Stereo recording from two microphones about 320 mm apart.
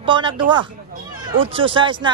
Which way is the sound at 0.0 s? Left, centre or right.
Centre.